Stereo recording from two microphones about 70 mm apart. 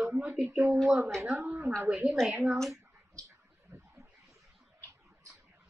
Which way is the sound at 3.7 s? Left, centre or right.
Right.